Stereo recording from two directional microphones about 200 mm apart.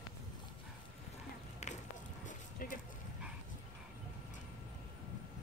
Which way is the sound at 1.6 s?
35° left (ahead or behind).